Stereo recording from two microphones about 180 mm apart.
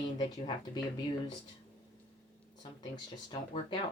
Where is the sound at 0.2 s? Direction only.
25° left (ahead or behind).